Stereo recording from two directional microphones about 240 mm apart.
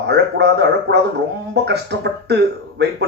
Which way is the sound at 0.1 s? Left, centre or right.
Right.